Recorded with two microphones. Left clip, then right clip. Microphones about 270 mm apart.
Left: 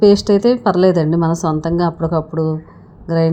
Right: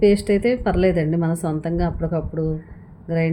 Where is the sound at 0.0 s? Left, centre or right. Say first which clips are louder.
Left 6 dB; centre.